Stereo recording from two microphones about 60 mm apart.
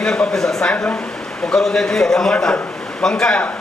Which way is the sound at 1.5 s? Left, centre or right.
Centre.